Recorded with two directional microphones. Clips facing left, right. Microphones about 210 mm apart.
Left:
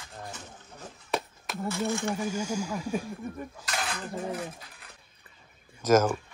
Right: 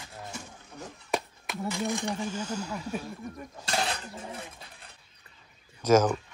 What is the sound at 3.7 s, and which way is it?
Dishes, 30° right (ahead or behind).